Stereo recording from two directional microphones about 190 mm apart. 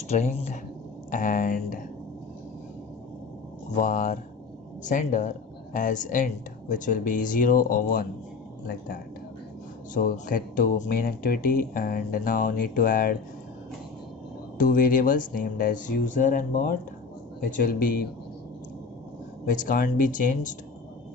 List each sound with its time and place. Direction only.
0.1 s speech: 40° left (ahead or behind)
3.8 s speech: 45° left (ahead or behind)
9.9 s speech: 45° left (ahead or behind)
14.6 s speech: 45° left (ahead or behind)
19.5 s speech: 45° left (ahead or behind)